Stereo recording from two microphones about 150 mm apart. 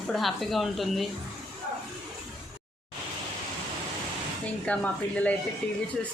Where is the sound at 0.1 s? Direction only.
Centre (ahead or behind).